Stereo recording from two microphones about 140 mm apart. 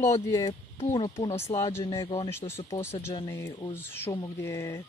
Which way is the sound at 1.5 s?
20° left (ahead or behind).